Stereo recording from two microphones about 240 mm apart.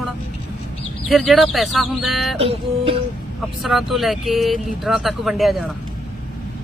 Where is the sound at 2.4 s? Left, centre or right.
Right.